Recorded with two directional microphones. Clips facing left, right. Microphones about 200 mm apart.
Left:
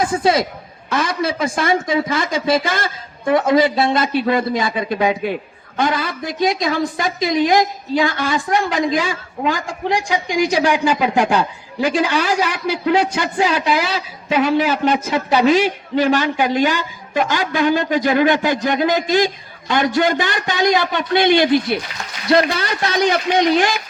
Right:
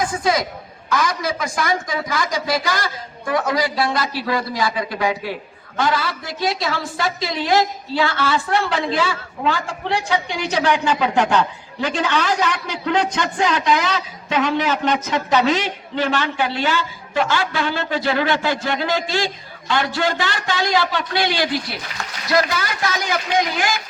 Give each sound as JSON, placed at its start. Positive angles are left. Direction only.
{"t": 0.0, "sound": "speech", "side_deg": 30}